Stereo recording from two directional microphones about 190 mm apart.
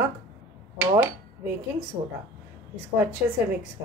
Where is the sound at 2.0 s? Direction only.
30° right (ahead or behind).